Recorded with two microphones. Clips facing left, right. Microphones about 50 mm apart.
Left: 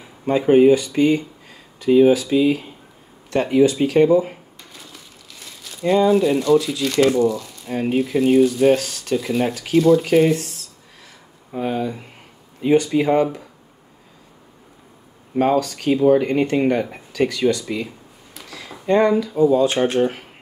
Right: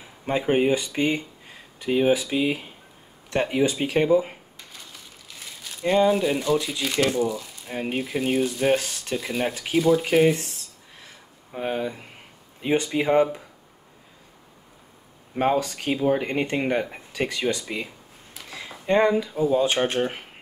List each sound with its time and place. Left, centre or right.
0.5 s speech: right
5.3 s crumpling: centre
5.9 s speech: centre
8.7 s speech: centre
9.1 s speech: centre
11.5 s speech: centre
12.6 s speech: right
15.3 s speech: centre
15.9 s speech: centre
18.5 s a sound: centre
19.5 s speech: centre